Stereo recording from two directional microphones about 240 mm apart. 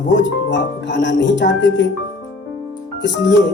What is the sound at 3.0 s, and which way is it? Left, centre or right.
Speech, left.